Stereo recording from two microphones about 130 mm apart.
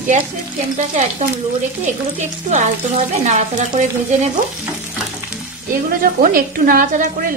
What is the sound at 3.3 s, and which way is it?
Speech, 65° right (ahead or behind).